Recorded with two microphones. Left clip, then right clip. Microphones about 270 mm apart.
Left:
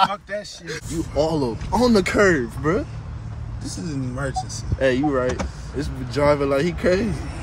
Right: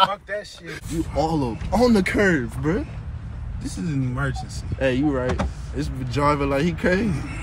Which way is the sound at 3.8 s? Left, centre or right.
Right.